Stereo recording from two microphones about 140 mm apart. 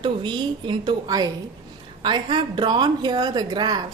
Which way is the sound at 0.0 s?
35° right (ahead or behind).